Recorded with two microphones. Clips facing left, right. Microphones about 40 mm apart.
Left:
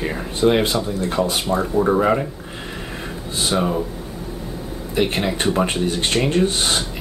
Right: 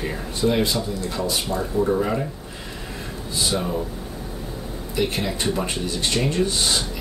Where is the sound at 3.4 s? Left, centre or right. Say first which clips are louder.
Left 4 dB; left.